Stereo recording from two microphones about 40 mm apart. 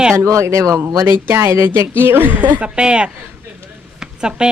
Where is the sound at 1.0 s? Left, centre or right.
Right.